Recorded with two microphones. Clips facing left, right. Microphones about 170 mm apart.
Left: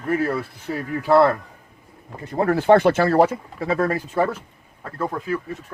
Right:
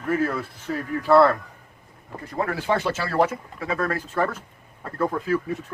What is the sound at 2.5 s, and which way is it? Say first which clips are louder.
Speech: left 11 dB; 55° left (ahead or behind).